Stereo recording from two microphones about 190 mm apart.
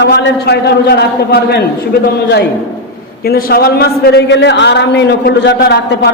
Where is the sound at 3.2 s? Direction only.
55° left (ahead or behind).